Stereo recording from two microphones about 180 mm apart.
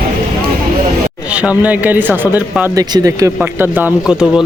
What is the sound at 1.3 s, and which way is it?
A man's voice, 5° right (ahead or behind).